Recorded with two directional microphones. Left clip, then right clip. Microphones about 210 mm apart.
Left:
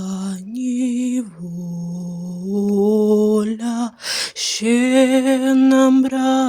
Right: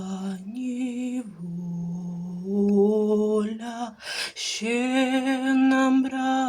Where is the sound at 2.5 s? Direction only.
45° left (ahead or behind).